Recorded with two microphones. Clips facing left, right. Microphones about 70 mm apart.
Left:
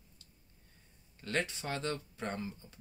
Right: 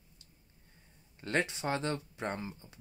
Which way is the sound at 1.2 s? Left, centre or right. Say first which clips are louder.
Right 3 dB; right.